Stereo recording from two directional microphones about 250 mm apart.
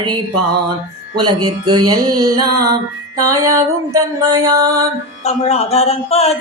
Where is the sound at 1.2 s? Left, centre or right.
Centre.